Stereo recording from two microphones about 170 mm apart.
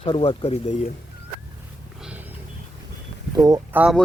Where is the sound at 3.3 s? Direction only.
20° right (ahead or behind).